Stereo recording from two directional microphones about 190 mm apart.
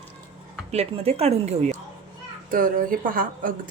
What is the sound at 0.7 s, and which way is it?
Speech, 30° right (ahead or behind).